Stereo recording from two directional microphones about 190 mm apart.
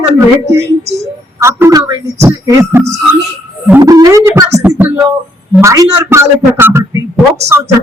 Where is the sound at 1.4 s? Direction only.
15° right (ahead or behind).